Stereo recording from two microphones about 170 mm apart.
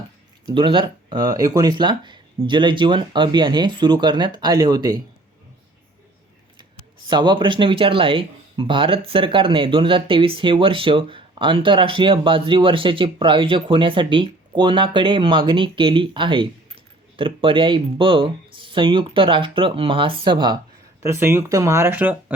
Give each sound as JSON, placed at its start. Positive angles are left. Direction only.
{"t": 0.4, "sound": "speech", "side_deg": -30}
{"t": 7.1, "sound": "speech", "side_deg": -25}
{"t": 21.0, "sound": "speech", "side_deg": -15}